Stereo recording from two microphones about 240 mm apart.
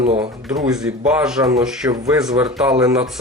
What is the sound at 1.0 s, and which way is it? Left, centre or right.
Speech, centre.